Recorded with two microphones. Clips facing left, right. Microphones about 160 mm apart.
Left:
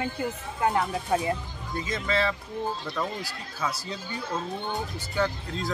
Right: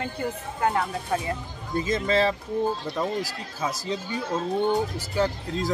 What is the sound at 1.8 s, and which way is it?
Speech, 40° right (ahead or behind).